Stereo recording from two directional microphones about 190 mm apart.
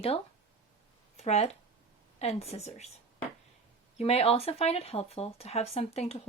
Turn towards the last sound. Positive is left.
turn(degrees=35)  # may be behind; listen again after turning